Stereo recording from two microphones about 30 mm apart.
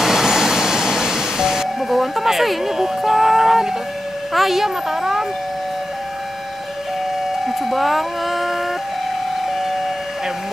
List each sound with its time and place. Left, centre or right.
0.0 s music: centre
1.8 s a sound: centre
4.3 s speech: centre
7.4 s ice cream truck: centre
9.5 s vehicle: centre